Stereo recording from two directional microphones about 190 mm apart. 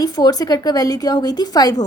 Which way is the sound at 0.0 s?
20° left (ahead or behind).